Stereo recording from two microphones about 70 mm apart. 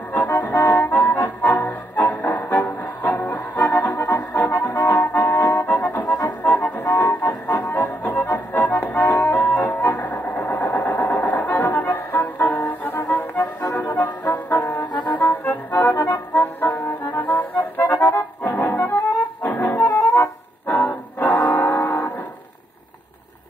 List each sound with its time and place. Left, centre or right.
0.1 s music: left
6.4 s music: left
14.3 s brass instrument: left
15.1 s music: left
19.9 s music: left
20.6 s music: left